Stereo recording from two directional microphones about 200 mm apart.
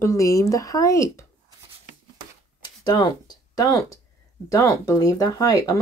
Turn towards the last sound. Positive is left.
turn(degrees=15)  # may be behind; listen again after turning